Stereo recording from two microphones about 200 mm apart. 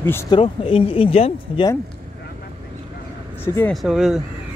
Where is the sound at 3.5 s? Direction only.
15° left (ahead or behind).